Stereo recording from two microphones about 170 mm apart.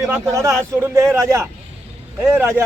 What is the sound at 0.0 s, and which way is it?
A man's voice, 15° right (ahead or behind).